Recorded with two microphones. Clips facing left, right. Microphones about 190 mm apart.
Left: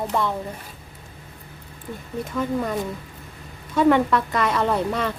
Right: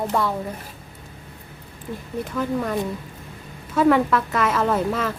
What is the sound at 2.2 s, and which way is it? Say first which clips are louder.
A woman's voice: even; centre (ahead or behind).